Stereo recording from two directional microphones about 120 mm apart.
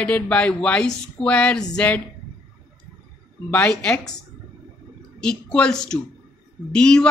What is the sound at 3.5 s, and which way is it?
Speech, 10° left (ahead or behind).